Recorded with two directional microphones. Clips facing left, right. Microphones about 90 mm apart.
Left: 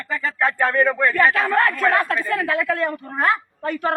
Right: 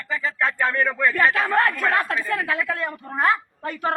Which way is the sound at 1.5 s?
25° right (ahead or behind).